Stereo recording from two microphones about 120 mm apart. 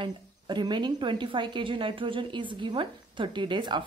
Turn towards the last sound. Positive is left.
turn(degrees=-40)  # may be behind; listen again after turning